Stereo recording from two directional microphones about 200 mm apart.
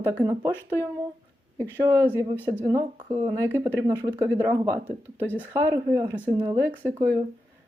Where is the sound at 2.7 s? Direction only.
15° right (ahead or behind).